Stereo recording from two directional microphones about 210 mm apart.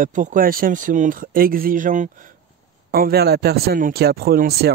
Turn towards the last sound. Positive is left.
turn(degrees=-45)  # may be behind; listen again after turning